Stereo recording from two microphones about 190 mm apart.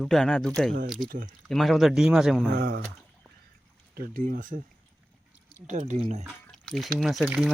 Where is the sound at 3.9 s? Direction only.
50° right (ahead or behind).